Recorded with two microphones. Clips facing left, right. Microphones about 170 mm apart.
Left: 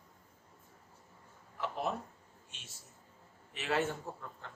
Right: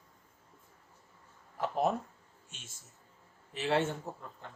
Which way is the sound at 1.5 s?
45° right (ahead or behind).